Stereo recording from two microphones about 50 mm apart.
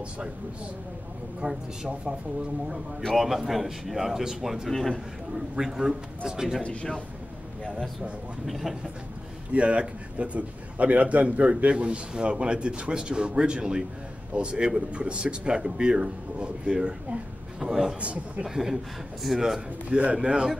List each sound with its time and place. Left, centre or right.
1.4 s a man's voice: right
3.2 s speech: centre
4.7 s speech: centre
5.3 s speech: centre
6.6 s speech: left
8.5 s speech: centre
9.5 s a man's voice: right
18.0 s a man's voice: right
18.4 s speech: centre
19.9 s a man's voice: right